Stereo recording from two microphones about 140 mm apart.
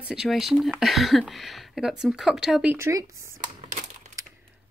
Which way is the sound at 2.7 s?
20° right (ahead or behind).